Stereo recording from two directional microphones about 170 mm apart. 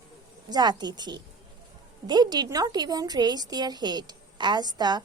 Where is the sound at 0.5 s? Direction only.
25° right (ahead or behind).